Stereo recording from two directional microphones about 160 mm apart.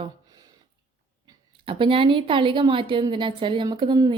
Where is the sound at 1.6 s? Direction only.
30° right (ahead or behind).